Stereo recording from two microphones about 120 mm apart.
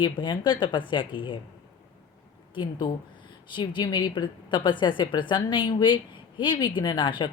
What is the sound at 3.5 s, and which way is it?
A woman's voice, 40° left (ahead or behind).